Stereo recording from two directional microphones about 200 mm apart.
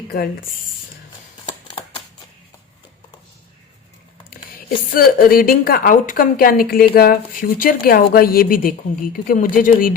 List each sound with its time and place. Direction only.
4.9 s a woman's voice: 45° left (ahead or behind)